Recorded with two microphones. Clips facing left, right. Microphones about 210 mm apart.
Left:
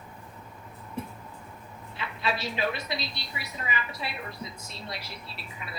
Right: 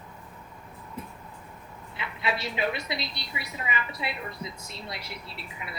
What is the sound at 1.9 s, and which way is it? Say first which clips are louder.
A woman's voice: even; 25° right (ahead or behind).